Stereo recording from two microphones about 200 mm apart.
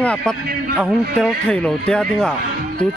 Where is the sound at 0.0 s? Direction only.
5° left (ahead or behind).